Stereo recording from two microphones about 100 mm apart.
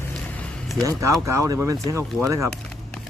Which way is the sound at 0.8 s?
30° right (ahead or behind).